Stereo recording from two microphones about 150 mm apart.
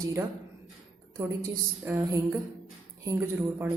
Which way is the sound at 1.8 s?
15° right (ahead or behind).